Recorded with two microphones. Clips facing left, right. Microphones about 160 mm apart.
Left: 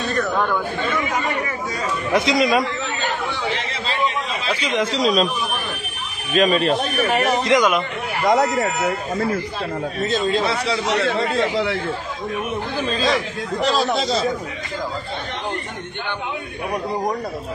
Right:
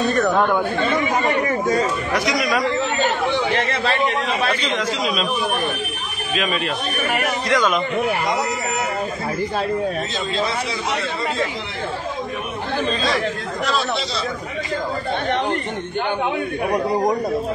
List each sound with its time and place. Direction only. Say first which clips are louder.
2.1 s speech: left 5 dB; 25° left (ahead or behind)
3.5 s a man's voice: right 5 dB; 65° right (ahead or behind)
4.6 s speech: left 2 dB; 10° left (ahead or behind)
4.9 s speech: left 5 dB; 40° left (ahead or behind)
6.3 s speech: left 6 dB; 40° left (ahead or behind); by 7.8 s 15° left (ahead or behind)
10.7 s speech: left 4 dB; 75° left (ahead or behind)
13.7 s speech: left 4 dB; 40° left (ahead or behind)